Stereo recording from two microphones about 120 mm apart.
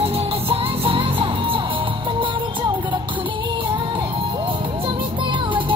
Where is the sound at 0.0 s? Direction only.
55° right (ahead or behind).